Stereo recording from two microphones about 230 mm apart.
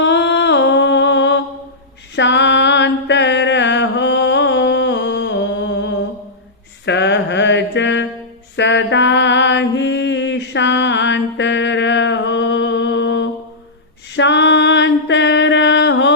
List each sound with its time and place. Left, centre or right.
0.0 s music: left
2.1 s mantra: left